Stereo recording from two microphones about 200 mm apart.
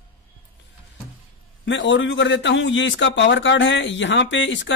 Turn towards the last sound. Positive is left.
turn(degrees=65)  # may be behind; listen again after turning